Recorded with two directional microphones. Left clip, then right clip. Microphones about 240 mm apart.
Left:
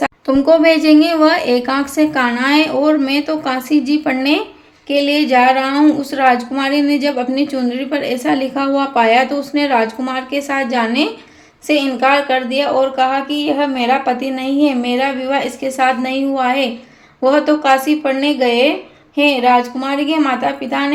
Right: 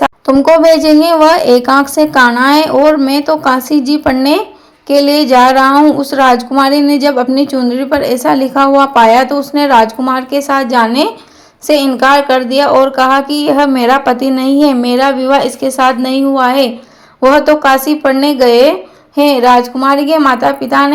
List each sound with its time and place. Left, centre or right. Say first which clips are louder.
0.6 s a woman's voice: right 4 dB; centre